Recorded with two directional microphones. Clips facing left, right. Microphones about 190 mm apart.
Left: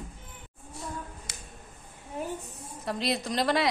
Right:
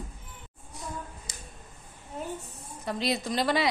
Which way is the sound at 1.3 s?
65° left (ahead or behind).